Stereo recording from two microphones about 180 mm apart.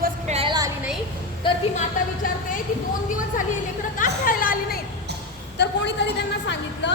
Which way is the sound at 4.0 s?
50° left (ahead or behind).